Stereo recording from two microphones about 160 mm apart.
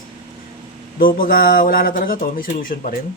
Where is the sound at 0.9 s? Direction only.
65° left (ahead or behind).